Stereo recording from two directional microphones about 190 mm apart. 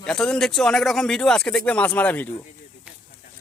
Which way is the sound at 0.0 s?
5° left (ahead or behind).